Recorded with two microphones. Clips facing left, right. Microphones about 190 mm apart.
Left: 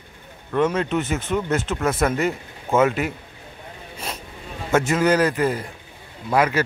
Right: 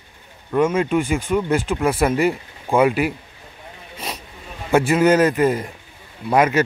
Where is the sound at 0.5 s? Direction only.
10° right (ahead or behind).